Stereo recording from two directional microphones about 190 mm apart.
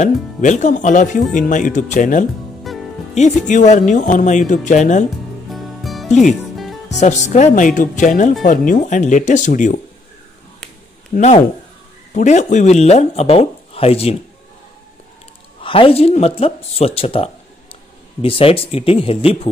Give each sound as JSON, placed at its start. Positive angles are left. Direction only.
{"t": 0.0, "sound": "speech", "side_deg": 40}
{"t": 5.5, "sound": "music", "side_deg": 0}
{"t": 6.0, "sound": "speech", "side_deg": 40}
{"t": 6.5, "sound": "music", "side_deg": 0}
{"t": 7.0, "sound": "speech", "side_deg": 40}
{"t": 11.1, "sound": "speech", "side_deg": 35}
{"t": 15.6, "sound": "speech", "side_deg": 30}